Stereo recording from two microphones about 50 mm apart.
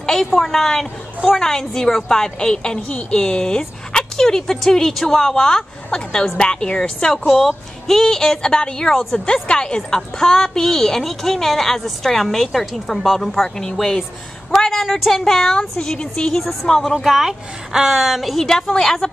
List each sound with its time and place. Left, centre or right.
0.0 s a sound: centre
0.4 s a woman's voice: centre
16.9 s a woman's voice: centre
18.4 s a woman's voice: centre